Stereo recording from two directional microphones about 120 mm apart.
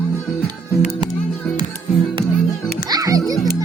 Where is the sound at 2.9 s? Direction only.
30° right (ahead or behind).